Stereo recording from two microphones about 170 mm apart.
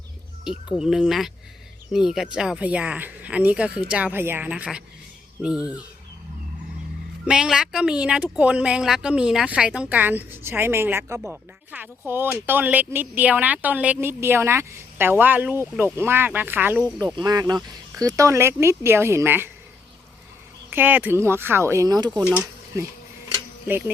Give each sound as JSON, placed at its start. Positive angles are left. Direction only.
{"t": 0.8, "sound": "speech", "side_deg": -5}
{"t": 7.3, "sound": "speech", "side_deg": -5}
{"t": 17.2, "sound": "speech", "side_deg": -20}
{"t": 20.7, "sound": "speech", "side_deg": -10}
{"t": 22.2, "sound": "speech", "side_deg": -10}